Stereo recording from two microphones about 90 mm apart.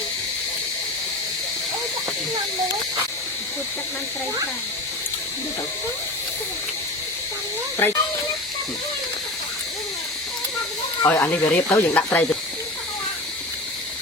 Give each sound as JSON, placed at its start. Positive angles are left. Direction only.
{"t": 7.8, "sound": "speech", "side_deg": 25}
{"t": 11.1, "sound": "speech", "side_deg": 20}